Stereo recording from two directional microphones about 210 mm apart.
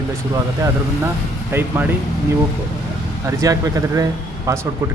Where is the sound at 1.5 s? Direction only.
10° right (ahead or behind).